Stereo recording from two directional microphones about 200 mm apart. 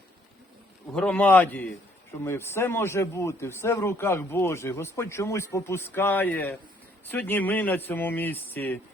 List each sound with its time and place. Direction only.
0.9 s speech: 5° left (ahead or behind)